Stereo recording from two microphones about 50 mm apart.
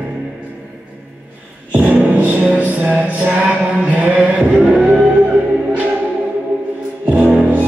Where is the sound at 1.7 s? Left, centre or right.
Right.